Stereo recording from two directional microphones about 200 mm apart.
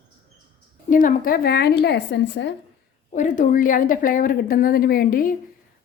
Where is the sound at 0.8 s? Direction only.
45° left (ahead or behind); by 2.5 s 60° left (ahead or behind).